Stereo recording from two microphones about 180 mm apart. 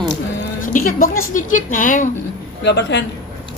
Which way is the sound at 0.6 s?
50° left (ahead or behind).